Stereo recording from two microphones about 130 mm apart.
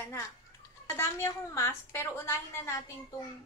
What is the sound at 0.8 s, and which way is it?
A woman's voice, 20° left (ahead or behind).